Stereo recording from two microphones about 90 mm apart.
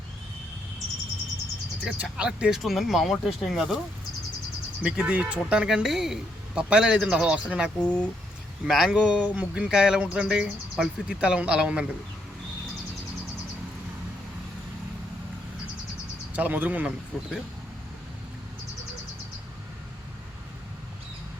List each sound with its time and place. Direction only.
1.8 s speech: 10° right (ahead or behind)
4.8 s speech: 10° right (ahead or behind)
7.8 s speech: 10° left (ahead or behind)
8.6 s speech: 5° right (ahead or behind)
16.3 s speech: 20° right (ahead or behind)